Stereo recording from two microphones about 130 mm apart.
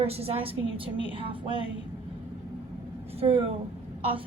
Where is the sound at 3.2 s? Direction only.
50° right (ahead or behind).